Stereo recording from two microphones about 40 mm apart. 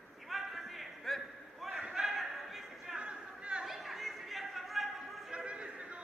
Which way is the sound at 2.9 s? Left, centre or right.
Right.